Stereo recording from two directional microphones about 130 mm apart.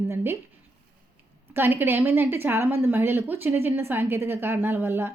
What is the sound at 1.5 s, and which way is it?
A woman's voice, 15° right (ahead or behind).